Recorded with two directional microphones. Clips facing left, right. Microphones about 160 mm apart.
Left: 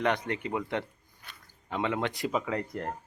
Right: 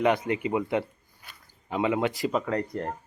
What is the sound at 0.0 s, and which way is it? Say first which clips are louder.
Speech: right 5 dB; 10° right (ahead or behind).